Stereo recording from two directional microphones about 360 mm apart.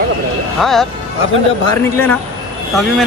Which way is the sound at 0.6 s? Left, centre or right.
Centre.